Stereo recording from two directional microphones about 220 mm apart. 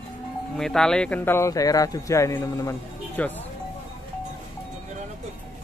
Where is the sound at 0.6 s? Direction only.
5° left (ahead or behind).